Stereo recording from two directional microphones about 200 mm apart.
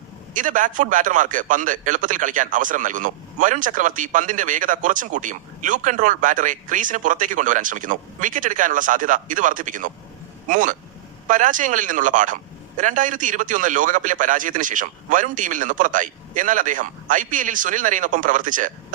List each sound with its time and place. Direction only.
0.3 s a man's voice: 40° right (ahead or behind)